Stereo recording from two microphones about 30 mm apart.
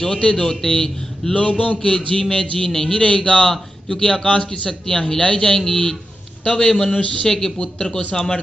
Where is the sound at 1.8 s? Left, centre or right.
Left.